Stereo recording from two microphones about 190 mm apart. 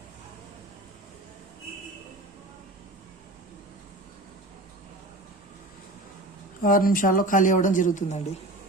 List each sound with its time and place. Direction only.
6.6 s speech: 45° left (ahead or behind)